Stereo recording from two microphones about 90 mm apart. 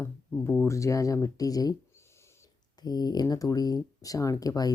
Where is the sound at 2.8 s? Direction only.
50° left (ahead or behind).